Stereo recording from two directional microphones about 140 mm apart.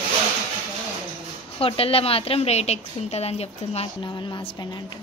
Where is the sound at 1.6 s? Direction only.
40° left (ahead or behind).